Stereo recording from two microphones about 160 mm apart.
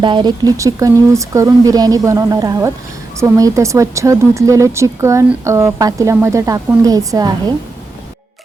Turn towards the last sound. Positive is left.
turn(degrees=-25)  # may be behind; listen again after turning